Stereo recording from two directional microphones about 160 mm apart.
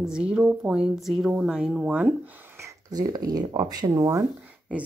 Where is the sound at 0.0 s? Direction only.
5° right (ahead or behind).